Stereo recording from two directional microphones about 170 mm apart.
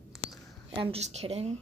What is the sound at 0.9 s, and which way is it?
Speech, 40° right (ahead or behind).